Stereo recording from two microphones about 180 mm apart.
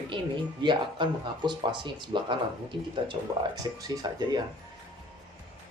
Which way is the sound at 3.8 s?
20° right (ahead or behind).